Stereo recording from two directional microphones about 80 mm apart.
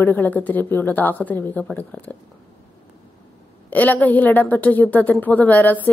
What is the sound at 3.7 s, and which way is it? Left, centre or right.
A woman's voice, centre.